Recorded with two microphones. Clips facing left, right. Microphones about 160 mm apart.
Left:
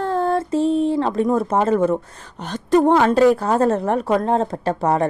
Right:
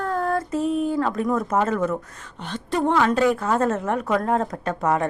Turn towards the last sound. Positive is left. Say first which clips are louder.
# left 4 dB
turn(degrees=35)  # may be behind; listen again after turning